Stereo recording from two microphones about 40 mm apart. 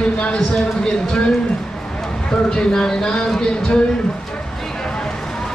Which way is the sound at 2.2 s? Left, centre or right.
Centre.